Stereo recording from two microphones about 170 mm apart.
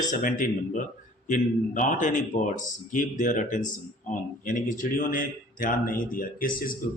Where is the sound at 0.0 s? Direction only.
50° left (ahead or behind).